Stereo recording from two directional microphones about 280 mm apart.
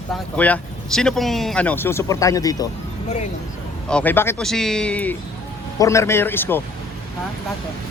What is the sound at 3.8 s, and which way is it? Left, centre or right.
Speech, centre.